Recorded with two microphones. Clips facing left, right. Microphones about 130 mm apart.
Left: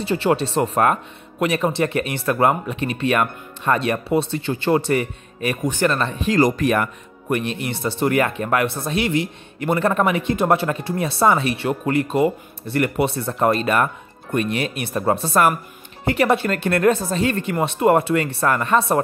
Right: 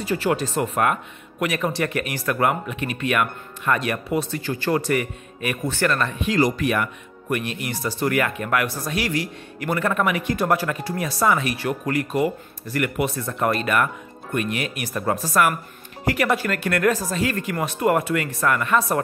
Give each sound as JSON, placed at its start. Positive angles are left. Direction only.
{"t": 0.0, "sound": "speech", "side_deg": 30}
{"t": 5.6, "sound": "speech", "side_deg": 15}